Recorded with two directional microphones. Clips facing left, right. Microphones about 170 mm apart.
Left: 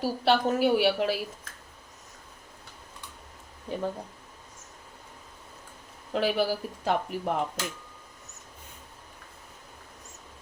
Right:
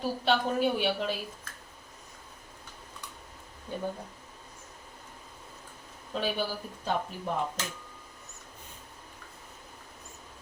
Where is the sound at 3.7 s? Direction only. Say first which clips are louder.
Left 4 dB; 90° left.